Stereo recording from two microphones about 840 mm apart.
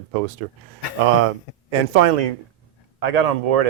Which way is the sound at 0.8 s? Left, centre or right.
Left.